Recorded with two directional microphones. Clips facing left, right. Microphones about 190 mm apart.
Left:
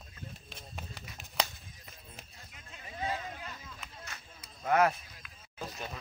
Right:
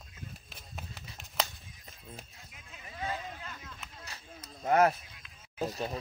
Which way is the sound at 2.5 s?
Centre (ahead or behind).